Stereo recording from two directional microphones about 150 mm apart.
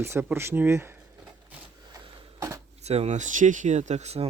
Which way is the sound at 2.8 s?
45° right (ahead or behind).